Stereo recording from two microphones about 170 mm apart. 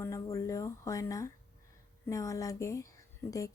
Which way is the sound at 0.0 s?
20° left (ahead or behind).